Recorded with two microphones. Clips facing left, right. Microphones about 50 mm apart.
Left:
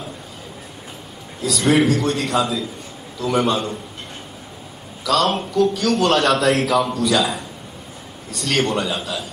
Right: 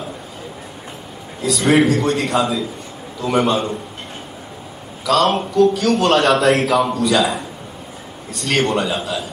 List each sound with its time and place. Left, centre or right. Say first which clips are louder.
1.4 s a man's voice: right 2 dB; centre
3.3 s a man's voice: right 2 dB; centre
5.0 s a man's voice: right 3 dB; centre